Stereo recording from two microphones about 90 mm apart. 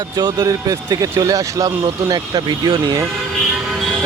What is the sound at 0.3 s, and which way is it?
Speech, 35° right (ahead or behind).